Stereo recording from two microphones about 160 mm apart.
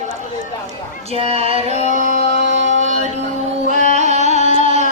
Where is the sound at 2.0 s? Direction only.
45° left (ahead or behind).